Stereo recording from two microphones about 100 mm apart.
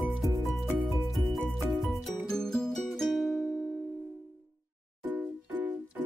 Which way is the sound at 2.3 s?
5° left (ahead or behind).